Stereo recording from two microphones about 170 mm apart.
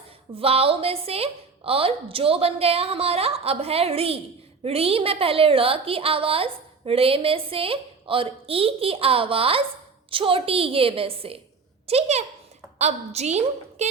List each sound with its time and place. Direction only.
0.3 s a woman's voice: 35° right (ahead or behind)